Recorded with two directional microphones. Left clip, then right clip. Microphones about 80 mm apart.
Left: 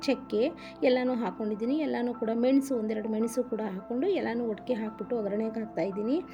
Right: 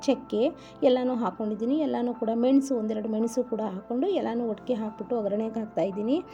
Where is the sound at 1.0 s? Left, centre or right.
Right.